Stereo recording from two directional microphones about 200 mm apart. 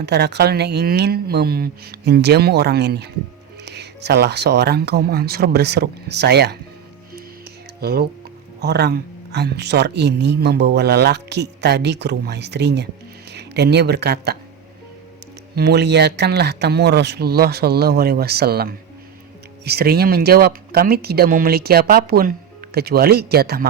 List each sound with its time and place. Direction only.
0.0 s speech: 55° right (ahead or behind)
7.8 s speech: 50° right (ahead or behind)
15.5 s speech: 55° right (ahead or behind)